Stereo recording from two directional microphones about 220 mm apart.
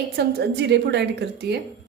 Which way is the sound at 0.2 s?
50° right (ahead or behind).